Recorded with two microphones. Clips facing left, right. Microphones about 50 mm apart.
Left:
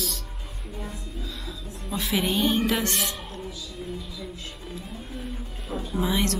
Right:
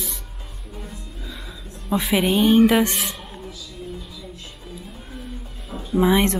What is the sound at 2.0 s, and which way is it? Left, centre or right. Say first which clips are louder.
Speech: right 5 dB; centre.